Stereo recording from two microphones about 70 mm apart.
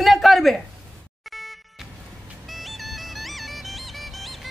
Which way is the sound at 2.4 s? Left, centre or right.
Centre.